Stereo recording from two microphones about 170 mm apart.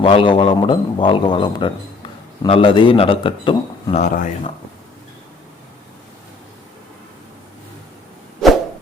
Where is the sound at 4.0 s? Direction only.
45° left (ahead or behind).